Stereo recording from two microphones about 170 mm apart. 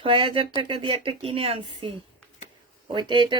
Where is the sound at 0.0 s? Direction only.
30° right (ahead or behind).